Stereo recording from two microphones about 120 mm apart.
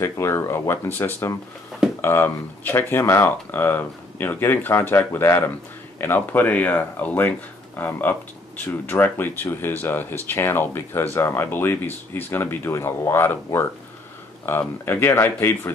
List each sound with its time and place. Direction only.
0.0 s speech: 20° left (ahead or behind)